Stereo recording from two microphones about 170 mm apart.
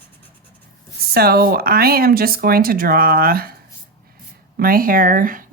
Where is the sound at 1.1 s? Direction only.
65° right (ahead or behind).